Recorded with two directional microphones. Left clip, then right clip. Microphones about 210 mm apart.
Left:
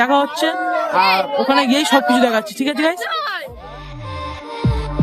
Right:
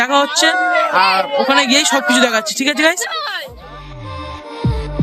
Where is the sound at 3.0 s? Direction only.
55° left (ahead or behind).